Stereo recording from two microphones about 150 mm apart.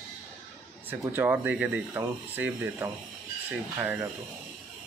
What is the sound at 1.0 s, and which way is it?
Speech, 15° right (ahead or behind).